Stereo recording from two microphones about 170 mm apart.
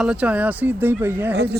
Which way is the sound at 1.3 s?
70° right (ahead or behind).